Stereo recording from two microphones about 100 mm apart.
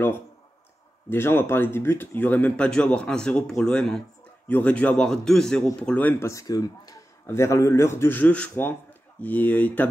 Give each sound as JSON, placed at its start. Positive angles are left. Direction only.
{"t": 1.1, "sound": "speech", "side_deg": 25}
{"t": 6.2, "sound": "a man's voice", "side_deg": 35}